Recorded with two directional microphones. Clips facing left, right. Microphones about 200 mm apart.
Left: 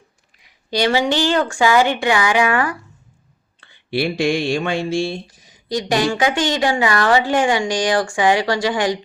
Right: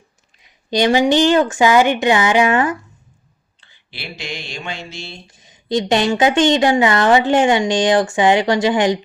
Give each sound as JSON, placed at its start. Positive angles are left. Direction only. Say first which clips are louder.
{"t": 0.4, "sound": "a woman's voice", "louder": "right 3 dB", "side_deg": -20}
{"t": 3.6, "sound": "speech", "louder": "left 15 dB", "side_deg": 55}
{"t": 5.3, "sound": "a woman's voice", "louder": "right 4 dB", "side_deg": -25}